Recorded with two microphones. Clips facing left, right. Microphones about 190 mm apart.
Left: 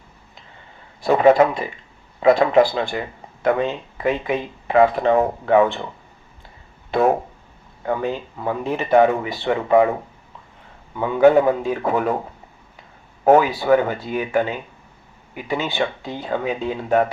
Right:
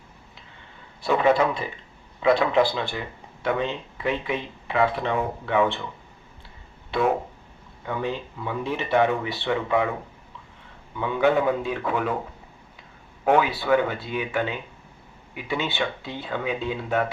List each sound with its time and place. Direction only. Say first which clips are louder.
1.0 s speech: left 6 dB; 45° left (ahead or behind)
7.9 s speech: left 5 dB; 45° left (ahead or behind)
10.9 s speech: left 7 dB; 45° left (ahead or behind)
13.2 s speech: left 6 dB; 40° left (ahead or behind)